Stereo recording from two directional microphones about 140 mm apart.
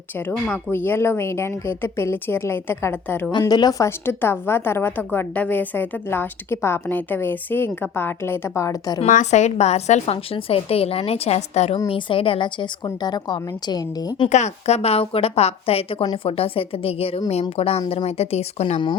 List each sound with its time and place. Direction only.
0.3 s a woman's voice: 15° left (ahead or behind)
3.4 s a woman's voice: 25° left (ahead or behind)
9.0 s a woman's voice: 60° left (ahead or behind)
11.9 s a woman's voice: 35° left (ahead or behind)
14.3 s a woman's voice: 55° left (ahead or behind)